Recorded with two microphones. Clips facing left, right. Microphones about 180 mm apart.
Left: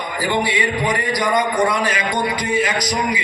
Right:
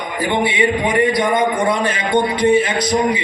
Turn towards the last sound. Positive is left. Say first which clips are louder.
# right 4 dB
turn(degrees=-30)  # may be behind; listen again after turning